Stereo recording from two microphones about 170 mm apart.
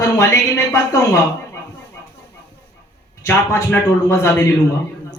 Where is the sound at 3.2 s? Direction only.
15° left (ahead or behind).